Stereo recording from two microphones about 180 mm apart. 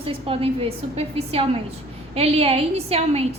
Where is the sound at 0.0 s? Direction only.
30° right (ahead or behind).